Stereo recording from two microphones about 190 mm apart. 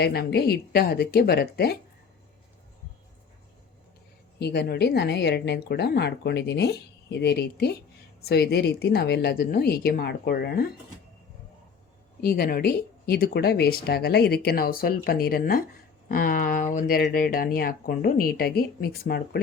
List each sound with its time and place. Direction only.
0.0 s a woman's voice: 55° left (ahead or behind)
4.4 s a woman's voice: 60° left (ahead or behind)
12.2 s speech: 50° left (ahead or behind)